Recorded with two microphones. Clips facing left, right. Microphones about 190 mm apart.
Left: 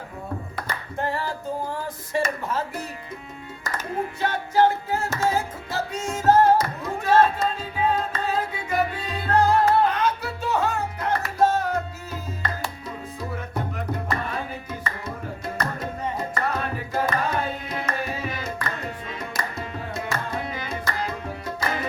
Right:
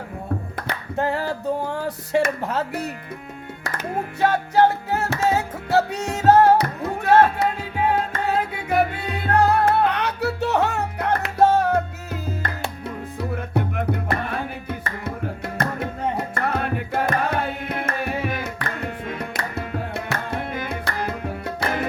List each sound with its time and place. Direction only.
0.5 s singing: 65° right (ahead or behind)
2.1 s speech: 65° right (ahead or behind)
4.2 s music: 65° right (ahead or behind)
13.5 s music: 60° right (ahead or behind)
19.0 s tabla: 60° right (ahead or behind)